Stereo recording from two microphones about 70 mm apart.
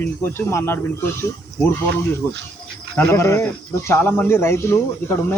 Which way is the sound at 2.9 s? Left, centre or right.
Left.